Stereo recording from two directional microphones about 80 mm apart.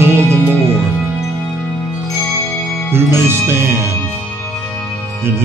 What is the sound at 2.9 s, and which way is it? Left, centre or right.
Speech, right.